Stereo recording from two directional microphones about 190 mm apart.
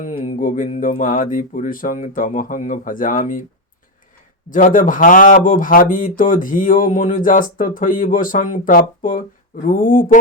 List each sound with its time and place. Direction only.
0.1 s speech: 40° left (ahead or behind)
4.4 s speech: 45° left (ahead or behind)